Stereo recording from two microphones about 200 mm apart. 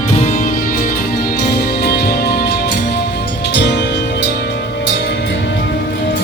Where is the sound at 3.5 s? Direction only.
60° left (ahead or behind).